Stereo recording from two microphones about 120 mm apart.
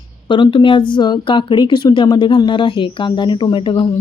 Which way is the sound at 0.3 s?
40° left (ahead or behind).